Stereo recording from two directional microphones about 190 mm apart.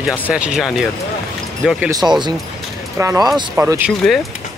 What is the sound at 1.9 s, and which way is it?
Speech, 20° right (ahead or behind).